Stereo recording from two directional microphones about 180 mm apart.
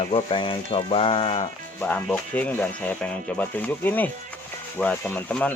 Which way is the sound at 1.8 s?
10° left (ahead or behind).